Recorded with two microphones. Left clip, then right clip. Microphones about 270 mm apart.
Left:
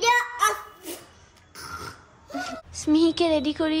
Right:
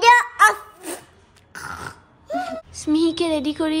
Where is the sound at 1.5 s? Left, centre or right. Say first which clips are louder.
Right 5 dB; centre.